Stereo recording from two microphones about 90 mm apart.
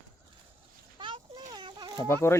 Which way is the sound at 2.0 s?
30° left (ahead or behind).